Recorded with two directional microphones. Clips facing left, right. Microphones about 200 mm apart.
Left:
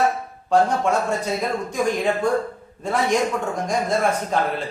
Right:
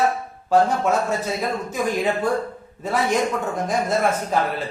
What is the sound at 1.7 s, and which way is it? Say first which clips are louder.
Speech: left 1 dB; 5° right (ahead or behind).